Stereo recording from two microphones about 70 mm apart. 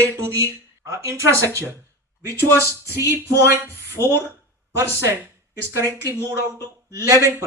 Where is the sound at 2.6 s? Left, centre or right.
Right.